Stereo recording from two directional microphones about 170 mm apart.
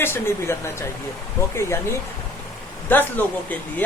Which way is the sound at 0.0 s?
15° left (ahead or behind).